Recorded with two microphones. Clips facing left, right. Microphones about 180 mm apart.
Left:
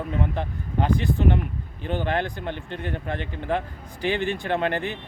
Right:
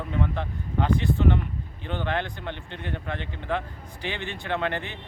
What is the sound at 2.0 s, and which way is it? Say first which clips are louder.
Speech: even; 40° left (ahead or behind).